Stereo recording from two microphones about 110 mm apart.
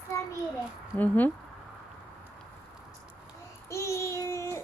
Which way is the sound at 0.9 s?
15° left (ahead or behind).